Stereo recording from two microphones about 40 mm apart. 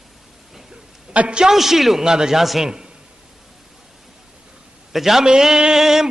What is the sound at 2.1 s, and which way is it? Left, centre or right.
Speech, centre.